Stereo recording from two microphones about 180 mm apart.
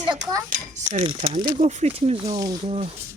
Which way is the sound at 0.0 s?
25° right (ahead or behind).